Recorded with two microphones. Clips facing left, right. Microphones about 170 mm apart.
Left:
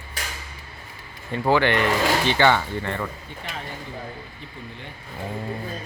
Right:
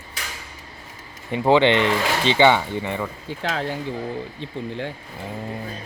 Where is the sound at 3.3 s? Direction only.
90° right.